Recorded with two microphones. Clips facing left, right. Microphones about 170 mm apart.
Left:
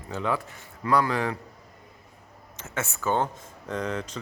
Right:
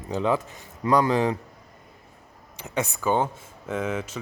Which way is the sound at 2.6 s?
15° right (ahead or behind).